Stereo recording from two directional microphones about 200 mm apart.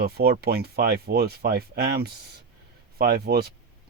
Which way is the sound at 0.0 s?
50° right (ahead or behind).